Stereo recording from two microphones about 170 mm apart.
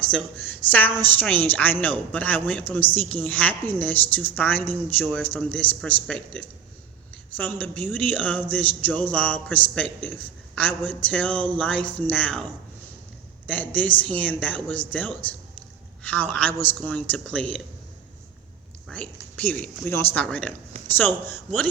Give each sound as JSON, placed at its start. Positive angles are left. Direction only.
{"t": 0.0, "sound": "a man's voice", "side_deg": 10}
{"t": 13.5, "sound": "a man's voice", "side_deg": 10}
{"t": 18.9, "sound": "a man's voice", "side_deg": 10}